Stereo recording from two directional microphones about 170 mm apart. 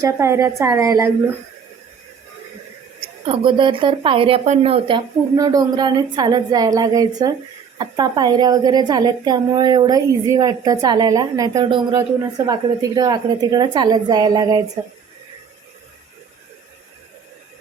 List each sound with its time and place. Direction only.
0.0 s a woman's voice: 15° right (ahead or behind)
3.2 s a woman's voice: 30° right (ahead or behind)